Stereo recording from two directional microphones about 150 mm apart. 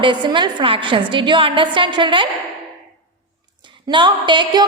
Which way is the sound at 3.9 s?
30° right (ahead or behind).